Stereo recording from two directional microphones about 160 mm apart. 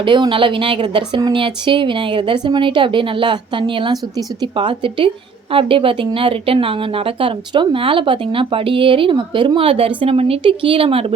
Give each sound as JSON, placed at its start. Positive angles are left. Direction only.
{"t": 0.0, "sound": "a woman's voice", "side_deg": -30}